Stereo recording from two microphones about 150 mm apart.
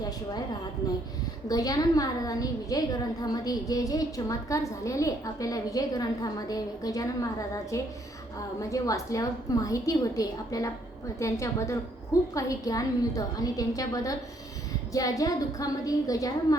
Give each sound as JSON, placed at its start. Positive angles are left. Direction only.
{"t": 0.8, "sound": "a woman's voice", "side_deg": 25}